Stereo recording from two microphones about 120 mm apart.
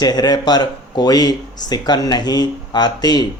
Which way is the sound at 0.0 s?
35° left (ahead or behind).